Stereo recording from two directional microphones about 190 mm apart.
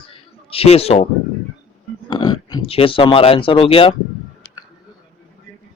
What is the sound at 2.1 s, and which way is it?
Speech, 20° left (ahead or behind).